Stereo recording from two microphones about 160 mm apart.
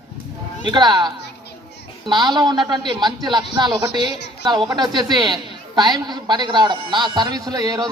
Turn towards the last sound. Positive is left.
turn(degrees=-20)  # may be behind; listen again after turning